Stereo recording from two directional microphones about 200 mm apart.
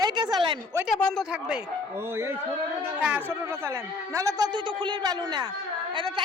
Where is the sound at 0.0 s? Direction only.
20° right (ahead or behind).